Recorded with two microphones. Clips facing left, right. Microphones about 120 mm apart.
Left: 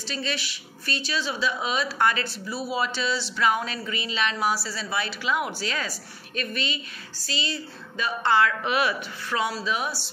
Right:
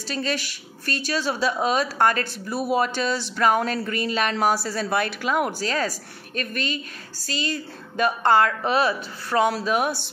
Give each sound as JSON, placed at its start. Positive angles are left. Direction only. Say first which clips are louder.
{"t": 0.1, "sound": "speech", "louder": "right 5 dB", "side_deg": -45}